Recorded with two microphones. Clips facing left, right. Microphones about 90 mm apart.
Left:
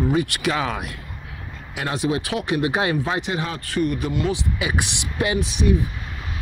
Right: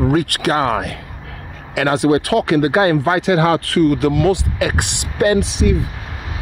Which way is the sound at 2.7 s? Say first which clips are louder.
Right 8 dB; 50° right (ahead or behind).